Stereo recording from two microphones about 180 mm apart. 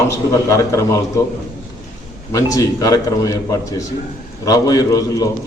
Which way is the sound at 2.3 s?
20° left (ahead or behind).